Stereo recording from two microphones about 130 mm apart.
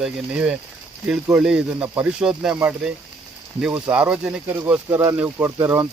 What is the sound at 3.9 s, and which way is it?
Speech, 10° right (ahead or behind).